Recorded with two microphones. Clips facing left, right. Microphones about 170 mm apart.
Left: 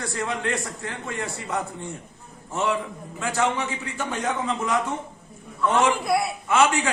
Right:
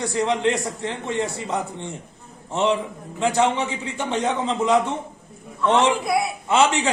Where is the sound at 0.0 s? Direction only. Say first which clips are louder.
Right 7 dB; 20° right (ahead or behind).